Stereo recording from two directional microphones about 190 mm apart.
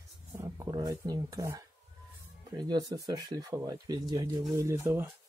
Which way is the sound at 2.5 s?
20° right (ahead or behind).